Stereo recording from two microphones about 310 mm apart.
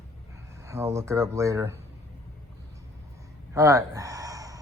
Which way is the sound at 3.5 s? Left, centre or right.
Centre.